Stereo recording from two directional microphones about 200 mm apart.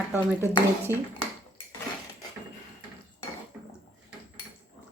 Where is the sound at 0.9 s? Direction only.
15° right (ahead or behind).